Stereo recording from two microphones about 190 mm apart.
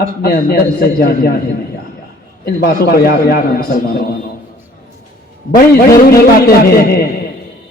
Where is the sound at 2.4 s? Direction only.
55° left (ahead or behind).